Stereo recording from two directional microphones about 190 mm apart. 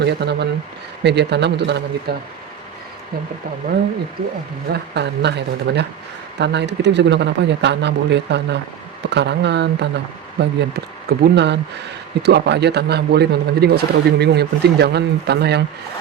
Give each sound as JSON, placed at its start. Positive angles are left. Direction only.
{"t": 0.0, "sound": "speech", "side_deg": -60}
{"t": 4.7, "sound": "speech", "side_deg": -65}